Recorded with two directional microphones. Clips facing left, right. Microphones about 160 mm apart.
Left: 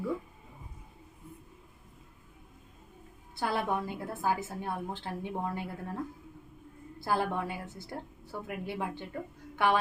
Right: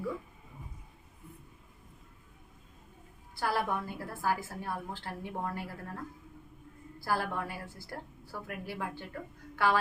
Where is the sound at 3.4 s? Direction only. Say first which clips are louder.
Left 1 dB; 20° left (ahead or behind).